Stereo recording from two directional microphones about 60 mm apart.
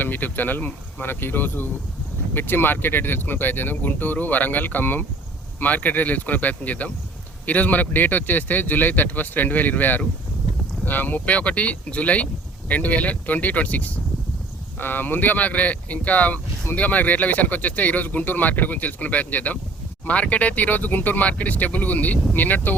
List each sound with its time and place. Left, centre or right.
0.0 s speech: left